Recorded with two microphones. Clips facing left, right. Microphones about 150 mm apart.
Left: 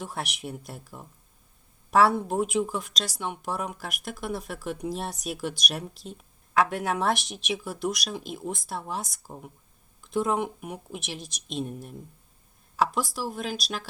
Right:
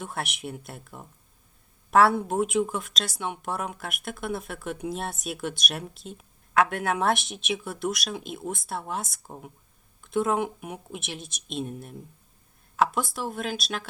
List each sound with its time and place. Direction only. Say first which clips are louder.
0.0 s speech: right 1 dB; centre (ahead or behind)
11.2 s speech: even; 40° left (ahead or behind)
11.5 s speech: even; centre (ahead or behind)